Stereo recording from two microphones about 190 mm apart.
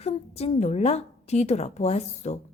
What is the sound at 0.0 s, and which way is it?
A woman's voice, 35° left (ahead or behind).